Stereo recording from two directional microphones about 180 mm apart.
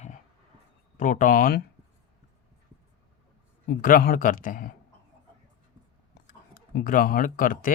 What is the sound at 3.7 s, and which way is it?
Speech, 50° left (ahead or behind).